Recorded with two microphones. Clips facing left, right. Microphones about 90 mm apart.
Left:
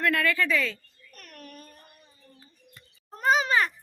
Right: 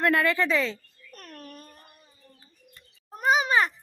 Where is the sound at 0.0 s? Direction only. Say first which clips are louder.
Right 2 dB; 25° right (ahead or behind).